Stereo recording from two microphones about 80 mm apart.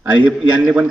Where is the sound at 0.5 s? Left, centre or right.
Centre.